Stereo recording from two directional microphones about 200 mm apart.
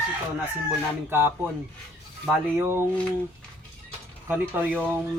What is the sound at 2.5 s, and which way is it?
Speech, 10° right (ahead or behind).